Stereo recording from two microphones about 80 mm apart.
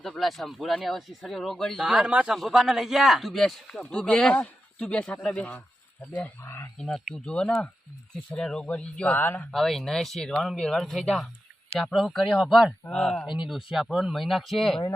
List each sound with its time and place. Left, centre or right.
0.0 s speech: centre
1.9 s speech: centre
6.4 s speech: left
6.7 s speech: centre; by 9.5 s left
9.5 s speech: centre
13.2 s speech: left
13.5 s speech: centre